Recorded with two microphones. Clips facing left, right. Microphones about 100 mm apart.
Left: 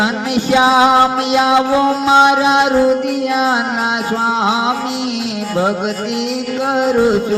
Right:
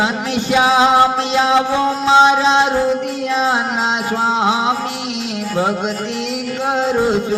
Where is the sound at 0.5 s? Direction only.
20° left (ahead or behind).